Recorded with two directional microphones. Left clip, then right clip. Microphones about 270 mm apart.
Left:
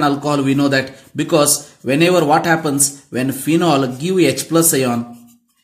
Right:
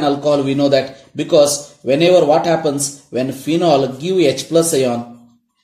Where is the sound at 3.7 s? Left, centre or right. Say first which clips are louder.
Right 2 dB; left.